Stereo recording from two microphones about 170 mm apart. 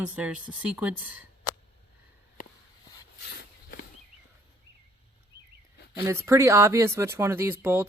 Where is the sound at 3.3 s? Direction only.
70° left (ahead or behind).